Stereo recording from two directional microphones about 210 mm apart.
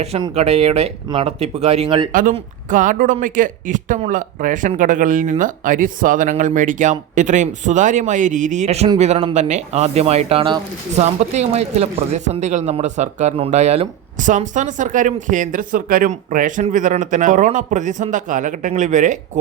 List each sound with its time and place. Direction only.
0.0 s speech: 30° right (ahead or behind)
2.3 s speech: 40° right (ahead or behind)